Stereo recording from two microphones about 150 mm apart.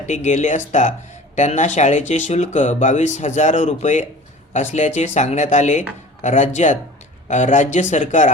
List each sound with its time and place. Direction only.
0.0 s speech: 50° left (ahead or behind)